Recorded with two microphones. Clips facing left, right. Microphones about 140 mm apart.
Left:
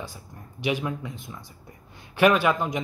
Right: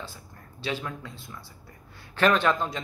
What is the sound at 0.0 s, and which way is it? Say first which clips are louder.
Speech: left 3 dB; 15° left (ahead or behind).